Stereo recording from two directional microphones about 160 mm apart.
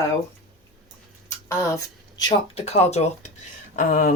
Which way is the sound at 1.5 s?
20° left (ahead or behind).